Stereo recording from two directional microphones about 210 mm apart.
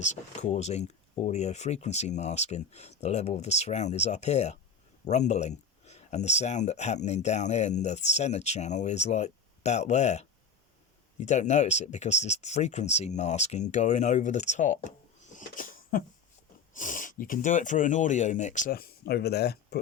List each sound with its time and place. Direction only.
0.0 s speech: 30° left (ahead or behind)
15.4 s a sound: 40° left (ahead or behind)
16.7 s speech: 40° left (ahead or behind)